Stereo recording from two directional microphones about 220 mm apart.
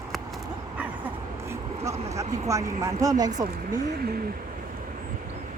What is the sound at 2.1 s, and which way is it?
Speech, 15° right (ahead or behind).